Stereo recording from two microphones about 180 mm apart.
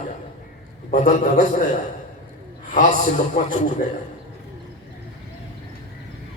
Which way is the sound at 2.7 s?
45° left (ahead or behind).